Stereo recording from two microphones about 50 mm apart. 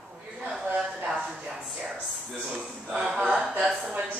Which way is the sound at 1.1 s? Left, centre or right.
Centre.